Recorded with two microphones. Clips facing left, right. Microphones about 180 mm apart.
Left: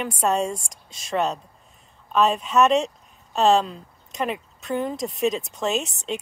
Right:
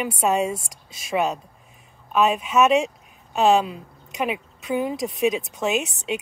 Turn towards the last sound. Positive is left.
turn(degrees=-10)  # may be behind; listen again after turning